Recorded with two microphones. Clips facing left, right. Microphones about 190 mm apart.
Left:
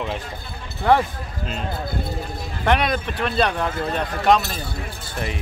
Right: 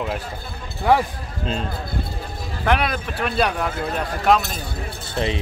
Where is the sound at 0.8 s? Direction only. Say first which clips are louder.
Even; 10° right (ahead or behind).